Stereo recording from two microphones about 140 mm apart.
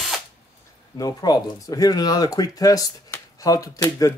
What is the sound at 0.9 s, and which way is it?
Speech, 25° left (ahead or behind).